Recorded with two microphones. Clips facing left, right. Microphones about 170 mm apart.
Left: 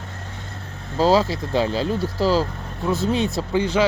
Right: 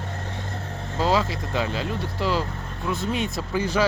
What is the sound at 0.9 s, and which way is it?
Speech, 35° left (ahead or behind).